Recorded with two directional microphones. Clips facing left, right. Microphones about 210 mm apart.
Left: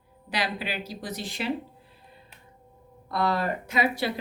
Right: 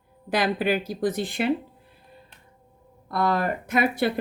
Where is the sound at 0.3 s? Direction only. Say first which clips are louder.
Right 8 dB; 50° right (ahead or behind).